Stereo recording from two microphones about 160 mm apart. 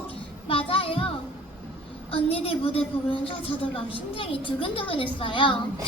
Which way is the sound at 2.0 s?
35° left (ahead or behind).